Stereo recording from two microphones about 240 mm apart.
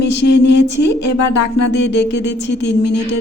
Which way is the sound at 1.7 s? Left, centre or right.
Left.